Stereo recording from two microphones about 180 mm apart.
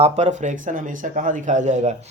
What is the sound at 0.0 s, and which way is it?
Speech, 40° right (ahead or behind).